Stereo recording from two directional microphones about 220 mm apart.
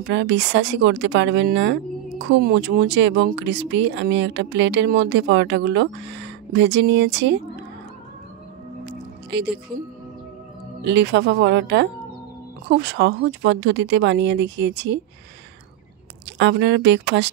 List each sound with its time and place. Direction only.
0.1 s speech: 55° right (ahead or behind)
9.3 s speech: 50° right (ahead or behind)
10.8 s speech: 50° right (ahead or behind)
16.3 s speech: 55° right (ahead or behind)